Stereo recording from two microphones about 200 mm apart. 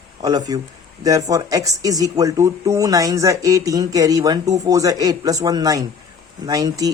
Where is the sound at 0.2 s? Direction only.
20° right (ahead or behind).